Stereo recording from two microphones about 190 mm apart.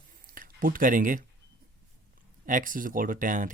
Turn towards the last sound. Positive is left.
turn(degrees=-40)  # may be behind; listen again after turning